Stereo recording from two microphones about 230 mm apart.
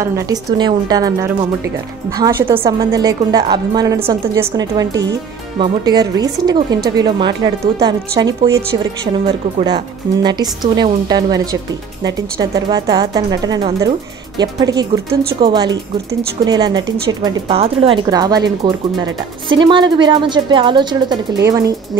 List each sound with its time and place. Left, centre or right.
0.0 s a woman's voice: centre
2.1 s a woman's voice: centre
10.2 s a woman's voice: centre